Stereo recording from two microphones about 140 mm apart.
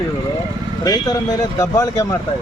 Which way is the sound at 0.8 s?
25° left (ahead or behind).